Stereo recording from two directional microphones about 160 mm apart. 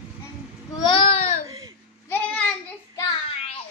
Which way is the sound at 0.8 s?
35° left (ahead or behind).